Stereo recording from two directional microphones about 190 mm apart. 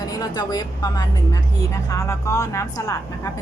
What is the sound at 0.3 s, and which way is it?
A woman's voice, 20° left (ahead or behind).